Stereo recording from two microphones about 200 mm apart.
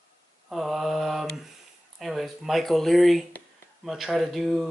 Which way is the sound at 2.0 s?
Centre (ahead or behind).